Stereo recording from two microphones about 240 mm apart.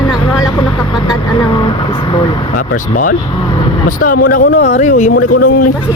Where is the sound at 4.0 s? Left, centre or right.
Left.